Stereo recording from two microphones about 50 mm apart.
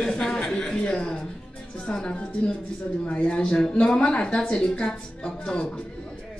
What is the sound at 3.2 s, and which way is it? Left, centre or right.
A woman's voice, centre.